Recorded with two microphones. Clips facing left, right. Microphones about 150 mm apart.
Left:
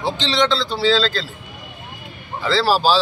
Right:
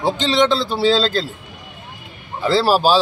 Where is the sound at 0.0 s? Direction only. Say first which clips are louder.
Right 3 dB; 50° right (ahead or behind).